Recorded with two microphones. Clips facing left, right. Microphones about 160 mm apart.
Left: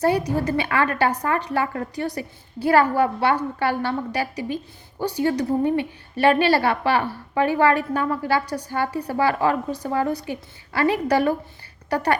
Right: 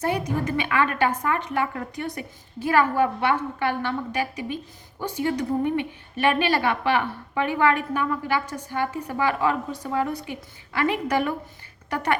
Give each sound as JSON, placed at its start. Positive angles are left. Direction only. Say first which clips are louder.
{"t": 0.0, "sound": "a woman's voice", "louder": "left 5 dB", "side_deg": 35}